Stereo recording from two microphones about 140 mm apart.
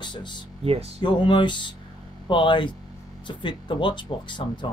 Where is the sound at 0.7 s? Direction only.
45° right (ahead or behind).